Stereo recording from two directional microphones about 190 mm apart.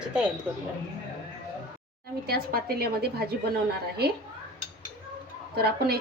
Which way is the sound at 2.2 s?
55° right (ahead or behind).